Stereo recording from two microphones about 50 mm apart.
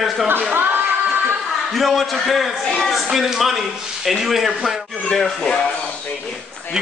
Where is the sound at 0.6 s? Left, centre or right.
Right.